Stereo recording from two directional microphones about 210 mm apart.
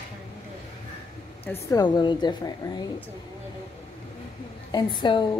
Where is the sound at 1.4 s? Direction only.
10° left (ahead or behind).